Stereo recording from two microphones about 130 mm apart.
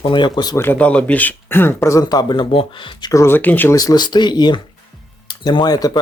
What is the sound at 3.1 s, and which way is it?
Speech, 20° left (ahead or behind).